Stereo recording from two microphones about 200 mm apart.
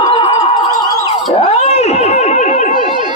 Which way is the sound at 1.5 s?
30° left (ahead or behind).